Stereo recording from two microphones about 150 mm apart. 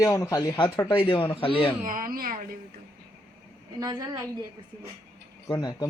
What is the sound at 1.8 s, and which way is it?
Speech, 65° right (ahead or behind).